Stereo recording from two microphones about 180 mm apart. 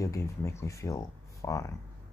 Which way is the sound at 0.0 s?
15° left (ahead or behind).